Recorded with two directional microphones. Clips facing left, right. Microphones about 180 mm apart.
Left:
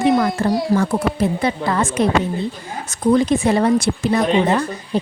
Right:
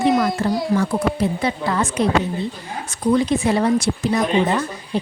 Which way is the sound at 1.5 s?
50° left (ahead or behind).